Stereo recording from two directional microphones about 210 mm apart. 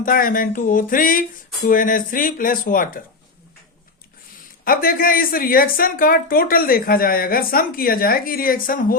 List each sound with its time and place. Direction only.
0.0 s speech: 40° left (ahead or behind)
4.6 s speech: 45° left (ahead or behind)